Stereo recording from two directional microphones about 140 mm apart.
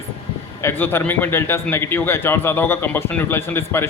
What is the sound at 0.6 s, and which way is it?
Speech, 15° left (ahead or behind).